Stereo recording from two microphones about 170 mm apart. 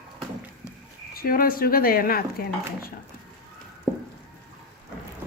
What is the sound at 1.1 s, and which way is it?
Speech, 60° left (ahead or behind).